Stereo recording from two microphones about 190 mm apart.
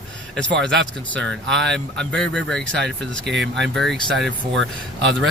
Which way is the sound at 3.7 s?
Centre (ahead or behind).